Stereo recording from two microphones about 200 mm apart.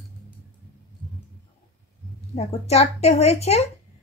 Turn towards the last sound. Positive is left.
turn(degrees=30)  # may be behind; listen again after turning